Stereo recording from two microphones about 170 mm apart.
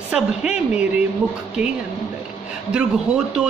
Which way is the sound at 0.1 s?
5° right (ahead or behind).